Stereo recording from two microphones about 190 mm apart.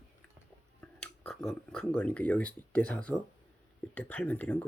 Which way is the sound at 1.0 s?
5° left (ahead or behind).